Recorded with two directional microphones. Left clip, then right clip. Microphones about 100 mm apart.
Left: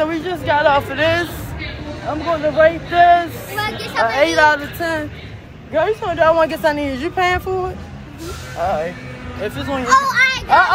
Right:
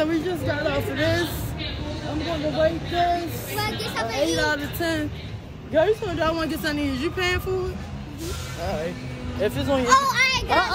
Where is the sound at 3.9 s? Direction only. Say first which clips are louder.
Left 11 dB; 50° left (ahead or behind).